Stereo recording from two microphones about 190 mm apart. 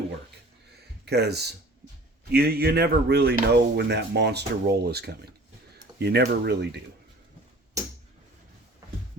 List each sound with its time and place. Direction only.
1.0 s speech: 60° right (ahead or behind)